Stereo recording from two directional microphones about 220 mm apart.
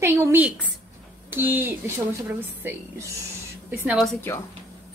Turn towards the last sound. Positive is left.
turn(degrees=-5)  # may be behind; listen again after turning